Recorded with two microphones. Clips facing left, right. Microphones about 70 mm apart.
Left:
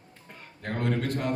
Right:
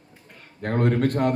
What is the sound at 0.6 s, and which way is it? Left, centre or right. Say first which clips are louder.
Speech: right 7 dB; right.